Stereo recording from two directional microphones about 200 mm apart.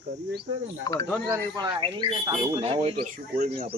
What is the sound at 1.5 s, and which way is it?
Speech, 20° right (ahead or behind).